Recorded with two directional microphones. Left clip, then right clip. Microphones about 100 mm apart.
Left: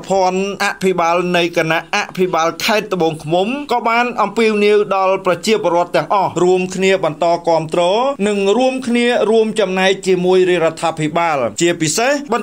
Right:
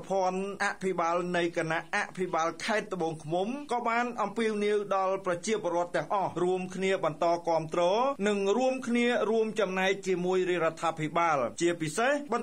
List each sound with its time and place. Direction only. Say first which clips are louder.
0.1 s a man's voice: left 15 dB; 30° left (ahead or behind)
8.4 s a sound: left 13 dB; 15° left (ahead or behind)
8.9 s a man's voice: left 15 dB; 25° left (ahead or behind)
11.1 s speech: left 11 dB; 35° left (ahead or behind)